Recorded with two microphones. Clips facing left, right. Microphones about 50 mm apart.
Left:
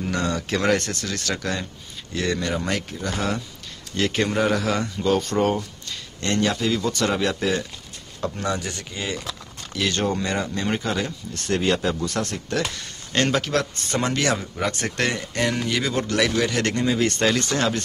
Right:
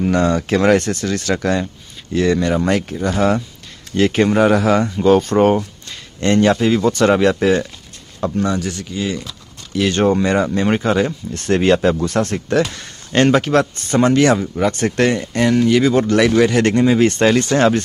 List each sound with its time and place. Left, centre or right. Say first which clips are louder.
0.0 s speech: right 9 dB; right
2.1 s speech: right 9 dB; centre; by 7.6 s right
8.2 s speech: right 7 dB; centre
8.5 s speech: right 8 dB; centre
9.8 s speech: right 8 dB; centre
10.7 s speech: right 8 dB; right
11.1 s speech: right 7 dB; right
12.1 s speech: right 8 dB; right
13.8 s speech: right 12 dB; centre
15.9 s speech: right 8 dB; centre